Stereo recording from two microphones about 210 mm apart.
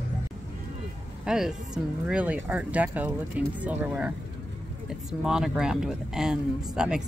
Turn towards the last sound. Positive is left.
turn(degrees=-5)  # may be behind; listen again after turning